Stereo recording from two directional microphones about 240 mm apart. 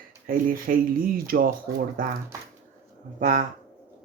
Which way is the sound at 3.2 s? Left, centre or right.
Right.